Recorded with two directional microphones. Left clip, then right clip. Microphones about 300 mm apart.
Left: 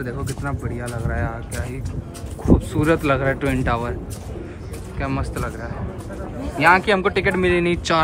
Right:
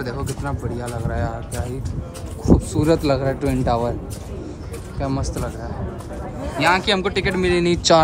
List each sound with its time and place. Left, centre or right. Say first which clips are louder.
0.0 s speech: right 1 dB; centre
2.4 s speech: even; centre
5.0 s speech: right 1 dB; centre
6.9 s speech: left 2 dB; centre